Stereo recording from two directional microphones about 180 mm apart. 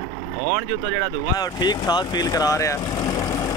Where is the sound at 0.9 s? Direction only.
20° left (ahead or behind).